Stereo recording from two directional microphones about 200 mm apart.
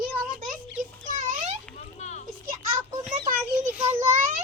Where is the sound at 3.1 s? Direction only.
40° right (ahead or behind).